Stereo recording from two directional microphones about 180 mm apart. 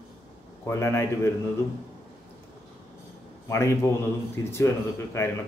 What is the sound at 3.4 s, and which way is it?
Speech, 15° left (ahead or behind).